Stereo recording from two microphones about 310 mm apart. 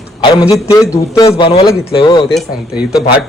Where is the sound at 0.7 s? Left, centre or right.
Centre.